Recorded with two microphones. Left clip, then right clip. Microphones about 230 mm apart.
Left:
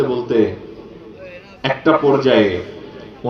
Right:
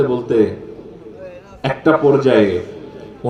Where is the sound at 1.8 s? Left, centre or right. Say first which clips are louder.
Right 1 dB; right.